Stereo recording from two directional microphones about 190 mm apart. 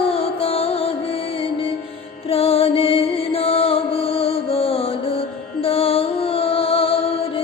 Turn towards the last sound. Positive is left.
turn(degrees=30)  # may be behind; listen again after turning